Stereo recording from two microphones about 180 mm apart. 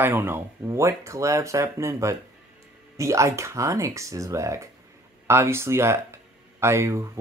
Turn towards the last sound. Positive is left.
turn(degrees=-15)  # may be behind; listen again after turning